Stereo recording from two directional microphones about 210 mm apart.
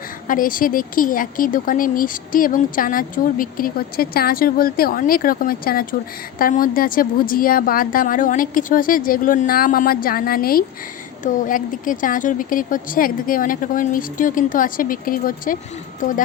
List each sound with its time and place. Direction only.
0.3 s a woman's voice: 40° left (ahead or behind)